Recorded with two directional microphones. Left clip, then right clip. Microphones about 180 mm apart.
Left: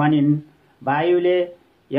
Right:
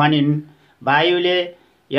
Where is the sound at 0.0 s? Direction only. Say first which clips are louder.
Right 2 dB; 25° right (ahead or behind).